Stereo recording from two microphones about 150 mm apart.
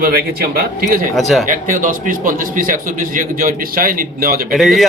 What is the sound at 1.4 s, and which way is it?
A man's voice, 60° right (ahead or behind).